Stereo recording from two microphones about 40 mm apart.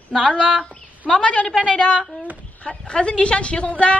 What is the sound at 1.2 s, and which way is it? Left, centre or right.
A woman's voice, left.